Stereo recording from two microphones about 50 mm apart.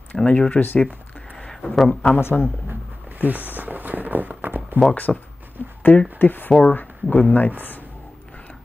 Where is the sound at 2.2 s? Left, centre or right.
Left.